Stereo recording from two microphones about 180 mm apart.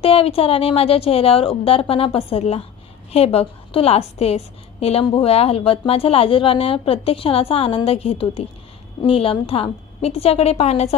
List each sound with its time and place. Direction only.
0.0 s a woman's voice: 30° left (ahead or behind)